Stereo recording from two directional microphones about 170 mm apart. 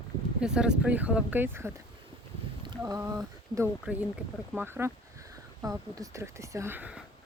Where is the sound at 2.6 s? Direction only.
20° right (ahead or behind).